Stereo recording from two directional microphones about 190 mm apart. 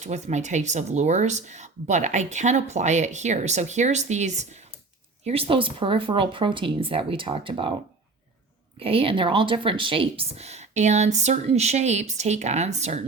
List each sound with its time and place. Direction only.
0.0 s speech: 35° right (ahead or behind)
8.8 s speech: 30° right (ahead or behind)